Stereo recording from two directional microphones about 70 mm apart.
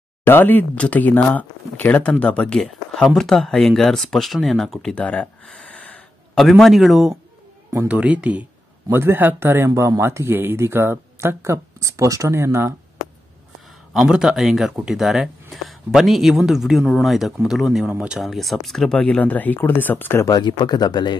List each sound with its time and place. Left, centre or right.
0.2 s speech: left; by 4.9 s centre
4.9 s a sound: centre
6.3 s speech: centre
7.9 s speech: centre
8.9 s speech: right
14.0 s speech: centre
18.9 s speech: centre; by 20.2 s left
20.2 s speech: left